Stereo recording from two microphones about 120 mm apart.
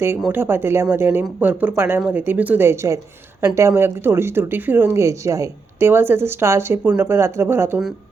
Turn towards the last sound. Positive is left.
turn(degrees=-20)  # may be behind; listen again after turning